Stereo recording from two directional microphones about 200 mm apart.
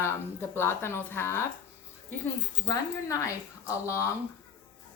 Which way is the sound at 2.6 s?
15° left (ahead or behind).